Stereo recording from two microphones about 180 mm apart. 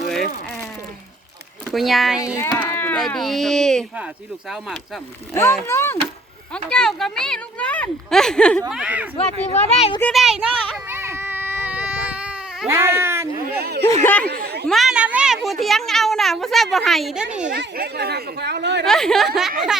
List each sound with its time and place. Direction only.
1.7 s speech: centre (ahead or behind)
2.1 s speech: 15° left (ahead or behind)
3.0 s speech: centre (ahead or behind)
5.3 s speech: 15° left (ahead or behind)
8.7 s speech: 5° right (ahead or behind)
9.5 s speech: 35° left (ahead or behind)
10.0 s speech: centre (ahead or behind)
10.8 s baby cry: 15° right (ahead or behind)
13.5 s speech: 60° right (ahead or behind)
14.0 s speech: 10° left (ahead or behind)
14.3 s a sound: 60° right (ahead or behind)
14.7 s speech: centre (ahead or behind)
17.5 s speech: 65° right (ahead or behind)
18.9 s speech: 5° left (ahead or behind)